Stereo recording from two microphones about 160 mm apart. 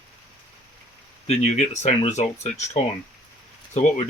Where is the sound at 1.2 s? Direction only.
45° left (ahead or behind).